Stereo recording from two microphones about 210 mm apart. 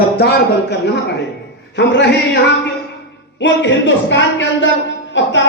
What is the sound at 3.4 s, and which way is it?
A man's voice, 60° left (ahead or behind).